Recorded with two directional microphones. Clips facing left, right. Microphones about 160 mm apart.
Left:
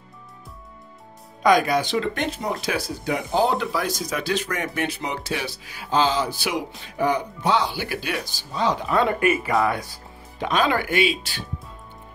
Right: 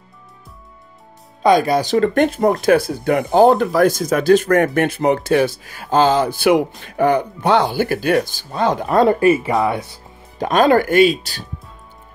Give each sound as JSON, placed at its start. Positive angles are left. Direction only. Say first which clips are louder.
{"t": 1.4, "sound": "speech", "louder": "right 4 dB", "side_deg": -35}
{"t": 9.0, "sound": "speech", "louder": "right 10 dB", "side_deg": -30}
{"t": 10.4, "sound": "speech", "louder": "right 8 dB", "side_deg": -45}